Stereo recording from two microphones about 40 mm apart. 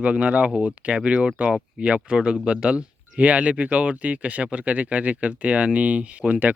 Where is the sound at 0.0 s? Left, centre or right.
Right.